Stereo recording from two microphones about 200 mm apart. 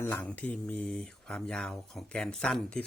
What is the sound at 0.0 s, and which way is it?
Speech, 10° left (ahead or behind).